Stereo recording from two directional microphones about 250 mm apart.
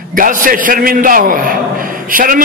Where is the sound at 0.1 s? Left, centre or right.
Right.